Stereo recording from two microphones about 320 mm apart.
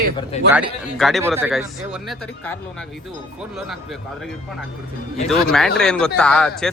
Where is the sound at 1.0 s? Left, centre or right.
Centre.